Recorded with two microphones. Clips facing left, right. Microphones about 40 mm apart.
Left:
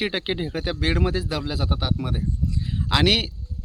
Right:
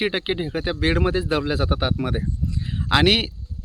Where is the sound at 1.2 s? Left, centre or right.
Right.